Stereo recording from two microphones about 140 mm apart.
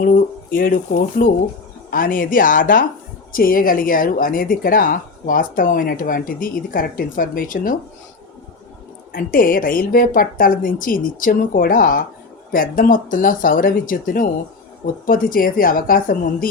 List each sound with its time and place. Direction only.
0.0 s speech: 85° left
3.3 s speech: 90° left
9.1 s speech: 90° left
15.0 s a woman's voice: 90° left